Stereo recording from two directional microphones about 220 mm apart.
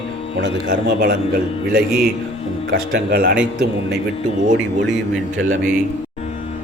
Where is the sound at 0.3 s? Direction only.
50° right (ahead or behind).